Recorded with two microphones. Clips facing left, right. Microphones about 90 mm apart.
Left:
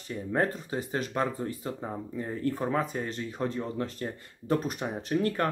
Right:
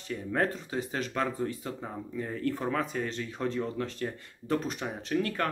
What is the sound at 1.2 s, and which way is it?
Speech, 25° left (ahead or behind).